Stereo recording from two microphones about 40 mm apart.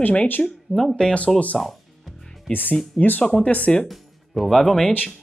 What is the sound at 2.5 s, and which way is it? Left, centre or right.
Speech, left.